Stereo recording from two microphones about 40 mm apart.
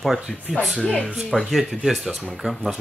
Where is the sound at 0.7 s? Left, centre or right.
Centre.